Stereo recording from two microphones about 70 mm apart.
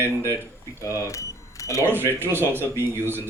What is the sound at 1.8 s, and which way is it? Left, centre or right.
Speech, right.